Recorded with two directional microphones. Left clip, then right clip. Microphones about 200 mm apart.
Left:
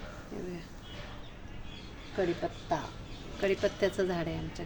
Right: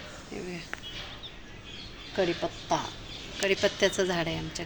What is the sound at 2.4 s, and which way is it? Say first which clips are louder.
A woman's voice: right 4 dB; 15° right (ahead or behind).